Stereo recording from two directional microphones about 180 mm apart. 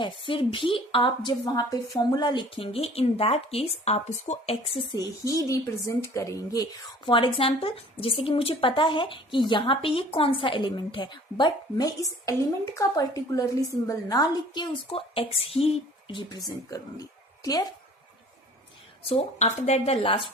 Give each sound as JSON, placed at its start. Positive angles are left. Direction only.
{"t": 0.0, "sound": "a woman's voice", "side_deg": 30}
{"t": 19.0, "sound": "speech", "side_deg": 35}